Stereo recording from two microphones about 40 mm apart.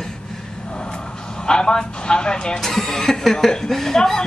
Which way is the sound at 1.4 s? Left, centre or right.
Left.